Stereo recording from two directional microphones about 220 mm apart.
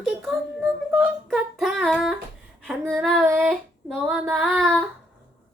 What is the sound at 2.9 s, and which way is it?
Child singing, centre (ahead or behind).